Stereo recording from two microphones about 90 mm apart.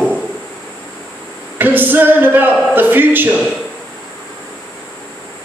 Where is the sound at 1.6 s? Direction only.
20° right (ahead or behind).